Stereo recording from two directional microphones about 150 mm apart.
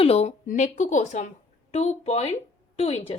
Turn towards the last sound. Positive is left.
turn(degrees=40)  # may be behind; listen again after turning